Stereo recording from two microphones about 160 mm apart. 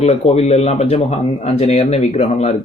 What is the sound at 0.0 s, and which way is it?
Speech, 40° left (ahead or behind).